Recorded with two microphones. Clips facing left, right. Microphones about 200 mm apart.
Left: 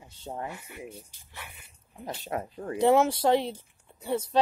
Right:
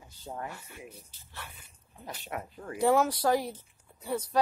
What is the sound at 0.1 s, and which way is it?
Speech, 25° left (ahead or behind).